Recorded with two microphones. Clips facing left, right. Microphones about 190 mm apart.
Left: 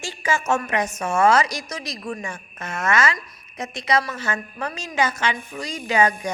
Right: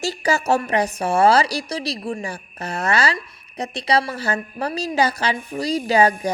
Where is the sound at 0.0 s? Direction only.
40° right (ahead or behind).